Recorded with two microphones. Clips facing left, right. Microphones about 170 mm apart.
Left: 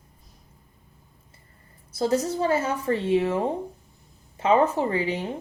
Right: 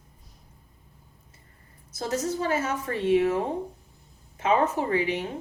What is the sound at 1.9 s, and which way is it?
Speech, 30° left (ahead or behind).